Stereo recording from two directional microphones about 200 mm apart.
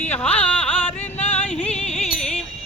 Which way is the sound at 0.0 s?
10° left (ahead or behind).